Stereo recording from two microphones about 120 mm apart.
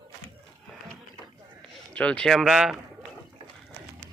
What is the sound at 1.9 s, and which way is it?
Speech, 10° left (ahead or behind).